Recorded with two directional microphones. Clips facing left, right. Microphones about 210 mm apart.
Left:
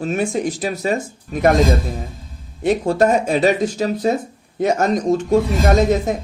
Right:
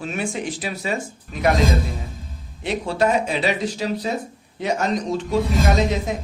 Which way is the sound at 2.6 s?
45° left (ahead or behind).